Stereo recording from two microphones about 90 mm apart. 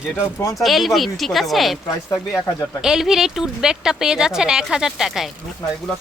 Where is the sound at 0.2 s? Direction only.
25° left (ahead or behind).